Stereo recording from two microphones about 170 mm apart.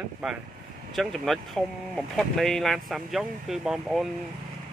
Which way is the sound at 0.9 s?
Centre (ahead or behind).